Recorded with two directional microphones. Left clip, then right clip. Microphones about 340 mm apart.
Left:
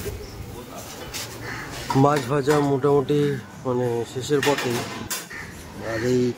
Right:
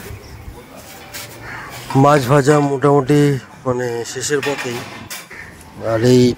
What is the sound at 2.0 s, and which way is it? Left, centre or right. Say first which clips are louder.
Speech: right 9 dB; centre.